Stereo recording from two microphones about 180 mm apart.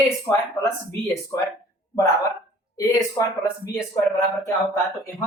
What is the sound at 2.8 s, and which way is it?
A woman's voice, 20° left (ahead or behind).